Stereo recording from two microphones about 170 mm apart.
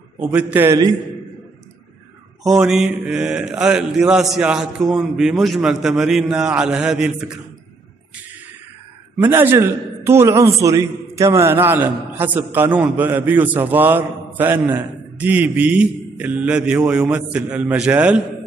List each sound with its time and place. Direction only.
0.2 s a man's voice: 10° right (ahead or behind)
2.4 s mantra: 5° right (ahead or behind)
9.2 s a man's voice: 10° right (ahead or behind)